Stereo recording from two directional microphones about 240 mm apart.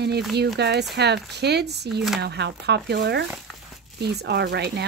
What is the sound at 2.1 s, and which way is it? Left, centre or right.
Speech, right.